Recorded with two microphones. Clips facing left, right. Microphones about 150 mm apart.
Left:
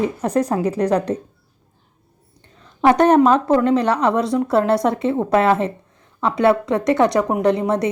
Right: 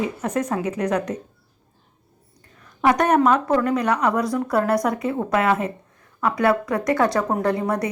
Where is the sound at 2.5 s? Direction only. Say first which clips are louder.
Left 4 dB; 30° left (ahead or behind).